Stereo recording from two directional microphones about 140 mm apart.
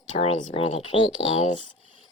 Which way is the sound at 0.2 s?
40° left (ahead or behind).